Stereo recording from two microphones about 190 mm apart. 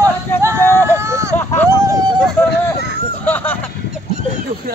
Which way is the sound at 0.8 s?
15° right (ahead or behind).